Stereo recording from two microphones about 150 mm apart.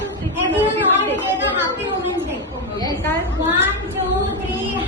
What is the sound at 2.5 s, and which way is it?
Chatter, 25° left (ahead or behind).